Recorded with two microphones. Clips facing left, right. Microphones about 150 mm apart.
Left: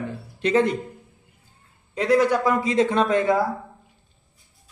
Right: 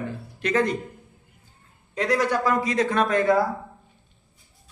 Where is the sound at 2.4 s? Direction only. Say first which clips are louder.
Left 2 dB; 25° left (ahead or behind).